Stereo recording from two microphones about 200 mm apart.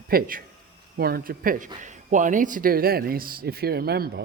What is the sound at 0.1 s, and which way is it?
Speech, 45° right (ahead or behind).